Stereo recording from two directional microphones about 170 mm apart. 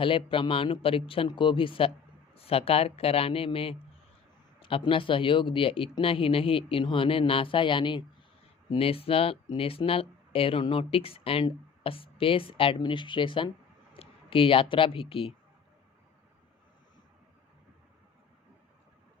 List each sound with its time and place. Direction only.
0.0 s speech: 30° left (ahead or behind)